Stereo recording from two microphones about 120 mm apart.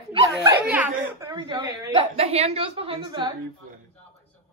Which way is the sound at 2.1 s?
60° right (ahead or behind).